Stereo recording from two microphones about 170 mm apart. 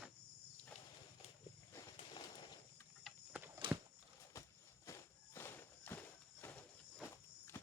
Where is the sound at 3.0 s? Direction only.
10° right (ahead or behind).